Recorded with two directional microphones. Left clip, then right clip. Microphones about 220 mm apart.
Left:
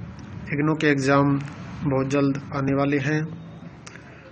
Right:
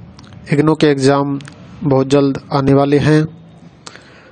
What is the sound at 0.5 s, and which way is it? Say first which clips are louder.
A man's voice: right 9 dB; 55° right (ahead or behind).